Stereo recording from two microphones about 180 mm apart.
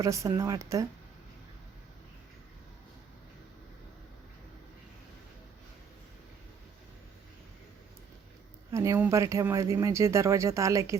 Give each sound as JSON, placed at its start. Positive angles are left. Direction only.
{"t": 0.0, "sound": "speech", "side_deg": -15}
{"t": 8.7, "sound": "speech", "side_deg": -15}